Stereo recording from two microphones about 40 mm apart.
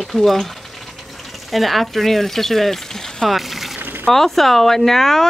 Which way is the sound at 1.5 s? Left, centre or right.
Centre.